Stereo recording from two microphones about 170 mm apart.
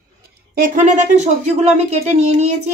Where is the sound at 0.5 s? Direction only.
50° right (ahead or behind).